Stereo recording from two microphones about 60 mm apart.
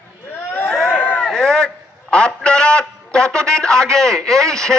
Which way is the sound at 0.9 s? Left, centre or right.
Centre.